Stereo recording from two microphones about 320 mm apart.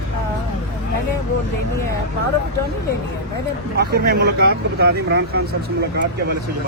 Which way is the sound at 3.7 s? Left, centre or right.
Right.